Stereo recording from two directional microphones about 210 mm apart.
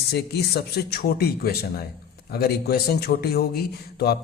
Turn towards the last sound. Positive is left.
turn(degrees=50)  # may be behind; listen again after turning